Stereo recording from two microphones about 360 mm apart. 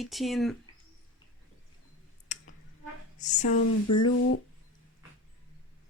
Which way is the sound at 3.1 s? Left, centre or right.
Centre.